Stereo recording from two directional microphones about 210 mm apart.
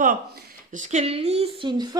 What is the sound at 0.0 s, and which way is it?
A woman's voice, 40° right (ahead or behind).